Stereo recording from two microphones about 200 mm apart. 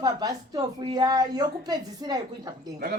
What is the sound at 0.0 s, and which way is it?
A woman's voice, 20° right (ahead or behind).